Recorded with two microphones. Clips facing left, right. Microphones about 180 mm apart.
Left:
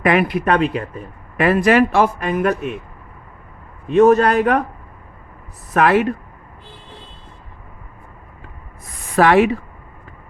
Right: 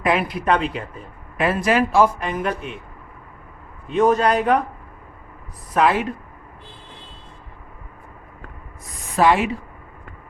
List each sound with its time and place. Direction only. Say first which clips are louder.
0.0 s speech: left 4 dB; 65° left (ahead or behind)
3.8 s speech: left 5 dB; 60° left (ahead or behind)
5.7 s speech: left 4 dB; 65° left (ahead or behind)
9.1 s speech: left 4 dB; 65° left (ahead or behind)